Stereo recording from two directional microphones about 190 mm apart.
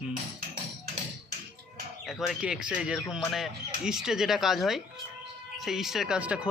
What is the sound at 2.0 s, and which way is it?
Speech, centre (ahead or behind).